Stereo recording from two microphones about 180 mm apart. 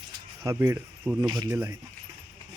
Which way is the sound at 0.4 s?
15° right (ahead or behind).